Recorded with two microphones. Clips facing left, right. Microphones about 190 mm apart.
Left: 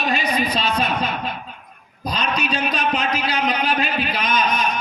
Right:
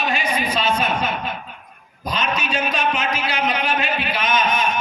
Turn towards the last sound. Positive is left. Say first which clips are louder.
# right 1 dB
turn(degrees=35)  # may be behind; listen again after turning